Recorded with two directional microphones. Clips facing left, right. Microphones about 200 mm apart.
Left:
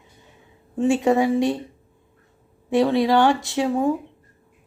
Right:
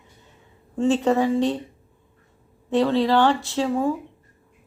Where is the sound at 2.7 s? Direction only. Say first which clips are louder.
Left 1 dB; 15° left (ahead or behind).